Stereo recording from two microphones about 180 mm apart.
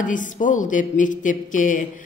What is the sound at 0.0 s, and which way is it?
Speech, 45° left (ahead or behind).